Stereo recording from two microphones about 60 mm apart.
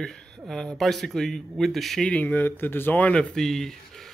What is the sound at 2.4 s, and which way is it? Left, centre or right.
Speech, left.